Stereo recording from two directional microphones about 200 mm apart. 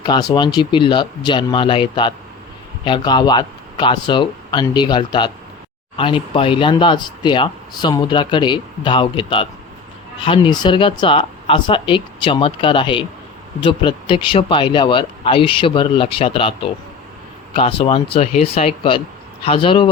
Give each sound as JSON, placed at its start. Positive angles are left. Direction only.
{"t": 0.0, "sound": "speech", "side_deg": 20}